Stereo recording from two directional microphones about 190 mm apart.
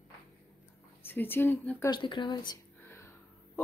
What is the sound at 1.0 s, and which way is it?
Speech, 10° left (ahead or behind).